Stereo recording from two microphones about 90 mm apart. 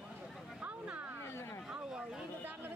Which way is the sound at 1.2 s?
30° left (ahead or behind).